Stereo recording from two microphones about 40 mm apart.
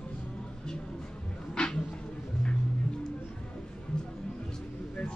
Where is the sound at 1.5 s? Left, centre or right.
Centre.